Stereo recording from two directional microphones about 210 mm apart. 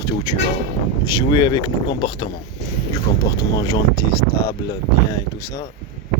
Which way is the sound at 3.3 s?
15° left (ahead or behind).